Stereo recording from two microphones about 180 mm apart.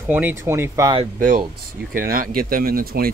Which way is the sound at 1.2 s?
50° right (ahead or behind).